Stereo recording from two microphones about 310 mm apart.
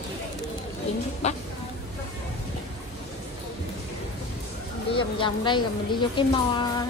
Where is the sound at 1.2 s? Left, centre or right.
Left.